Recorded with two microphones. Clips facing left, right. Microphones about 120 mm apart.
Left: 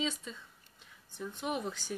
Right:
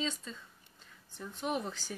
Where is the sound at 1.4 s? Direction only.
5° left (ahead or behind).